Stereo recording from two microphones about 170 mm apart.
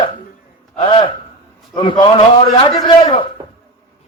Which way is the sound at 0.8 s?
30° left (ahead or behind).